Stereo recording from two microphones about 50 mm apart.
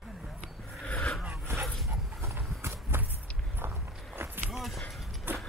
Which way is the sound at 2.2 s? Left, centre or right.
Right.